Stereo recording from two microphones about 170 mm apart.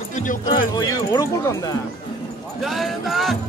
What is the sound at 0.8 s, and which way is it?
Speech, 20° left (ahead or behind).